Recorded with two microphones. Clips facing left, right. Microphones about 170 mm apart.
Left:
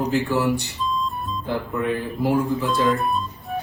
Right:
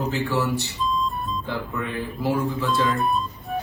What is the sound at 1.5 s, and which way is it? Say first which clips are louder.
Speech: left 8 dB; 15° left (ahead or behind).